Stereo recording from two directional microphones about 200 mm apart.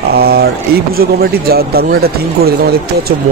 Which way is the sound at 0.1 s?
50° right (ahead or behind).